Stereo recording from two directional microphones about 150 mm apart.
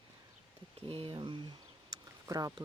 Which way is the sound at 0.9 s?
35° right (ahead or behind).